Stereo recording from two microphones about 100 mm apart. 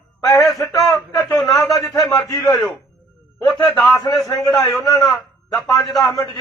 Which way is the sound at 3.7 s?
10° left (ahead or behind).